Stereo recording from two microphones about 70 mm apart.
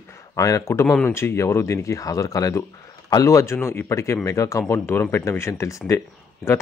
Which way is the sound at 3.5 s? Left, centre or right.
Left.